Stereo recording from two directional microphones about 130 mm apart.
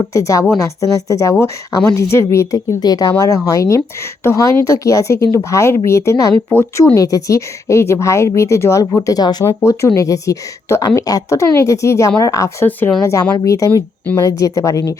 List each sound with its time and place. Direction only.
0.0 s a woman's voice: 25° left (ahead or behind)
6.9 s a woman's voice: 25° left (ahead or behind)
9.4 s a woman's voice: 20° left (ahead or behind)